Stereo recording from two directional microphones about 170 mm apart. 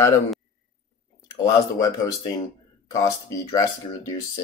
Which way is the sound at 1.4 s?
20° left (ahead or behind).